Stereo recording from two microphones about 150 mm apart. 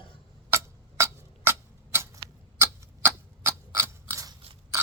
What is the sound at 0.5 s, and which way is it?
Tick-tock, 20° right (ahead or behind).